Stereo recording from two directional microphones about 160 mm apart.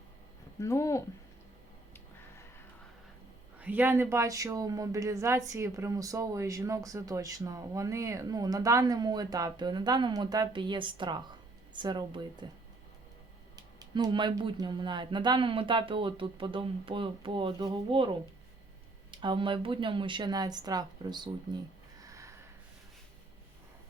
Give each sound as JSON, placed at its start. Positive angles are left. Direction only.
{"t": 0.6, "sound": "speech", "side_deg": 20}
{"t": 3.6, "sound": "speech", "side_deg": -10}
{"t": 13.6, "sound": "speech", "side_deg": -25}
{"t": 19.1, "sound": "speech", "side_deg": -30}
{"t": 22.0, "sound": "snort", "side_deg": -20}